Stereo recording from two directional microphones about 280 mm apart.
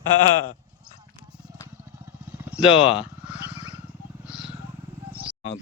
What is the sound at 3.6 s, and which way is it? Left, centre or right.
Wild animals, centre.